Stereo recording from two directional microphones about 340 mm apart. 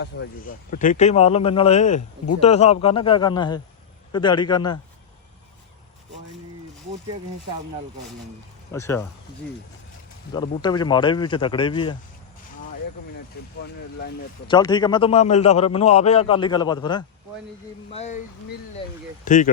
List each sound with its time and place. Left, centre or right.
0.0 s a man's voice: left
8.7 s a man's voice: centre
10.3 s a man's voice: centre
14.4 s a man's voice: centre